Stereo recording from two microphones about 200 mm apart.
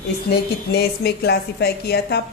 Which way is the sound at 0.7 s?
55° left (ahead or behind).